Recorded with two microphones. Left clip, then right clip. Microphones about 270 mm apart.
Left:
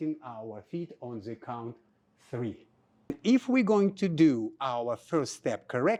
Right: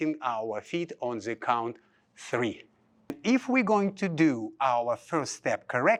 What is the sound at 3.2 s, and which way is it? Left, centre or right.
Speech, right.